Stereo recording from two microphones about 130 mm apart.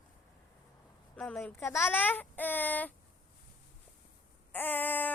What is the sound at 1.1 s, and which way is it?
Speech, 5° left (ahead or behind).